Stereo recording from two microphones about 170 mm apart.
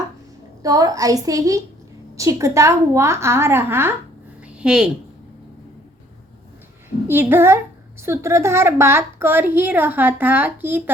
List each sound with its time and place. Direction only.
0.6 s a woman's voice: 20° right (ahead or behind)
4.4 s a sound: 5° right (ahead or behind)
7.1 s a woman's voice: 15° right (ahead or behind)